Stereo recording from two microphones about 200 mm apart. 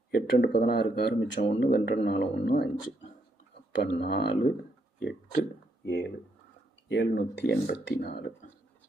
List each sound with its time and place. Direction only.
0.1 s speech: 50° left (ahead or behind)
5.8 s speech: 70° left (ahead or behind); by 8.2 s 55° left (ahead or behind)